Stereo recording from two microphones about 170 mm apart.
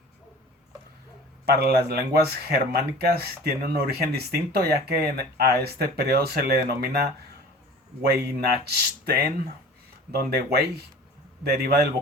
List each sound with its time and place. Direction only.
1.5 s speech: 70° right (ahead or behind)